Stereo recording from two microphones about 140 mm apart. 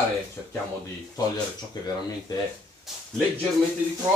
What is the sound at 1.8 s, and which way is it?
Speech, 30° left (ahead or behind).